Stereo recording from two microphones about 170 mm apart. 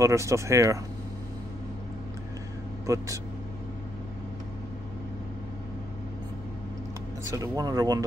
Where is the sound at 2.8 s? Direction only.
20° right (ahead or behind).